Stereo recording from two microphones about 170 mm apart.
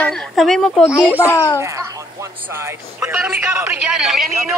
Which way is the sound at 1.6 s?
15° right (ahead or behind).